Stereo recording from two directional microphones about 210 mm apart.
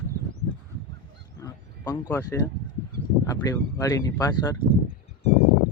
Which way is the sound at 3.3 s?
15° left (ahead or behind).